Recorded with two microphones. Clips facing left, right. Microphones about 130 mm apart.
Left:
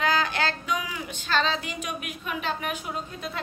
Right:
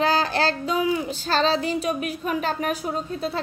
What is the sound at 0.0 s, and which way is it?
Child singing, 35° right (ahead or behind).